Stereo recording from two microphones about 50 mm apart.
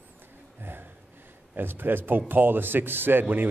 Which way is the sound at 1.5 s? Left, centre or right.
Right.